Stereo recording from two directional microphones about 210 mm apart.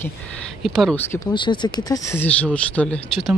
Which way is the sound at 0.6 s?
Centre (ahead or behind).